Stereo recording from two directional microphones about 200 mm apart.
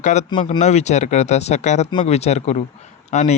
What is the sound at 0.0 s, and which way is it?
Speech, 35° left (ahead or behind).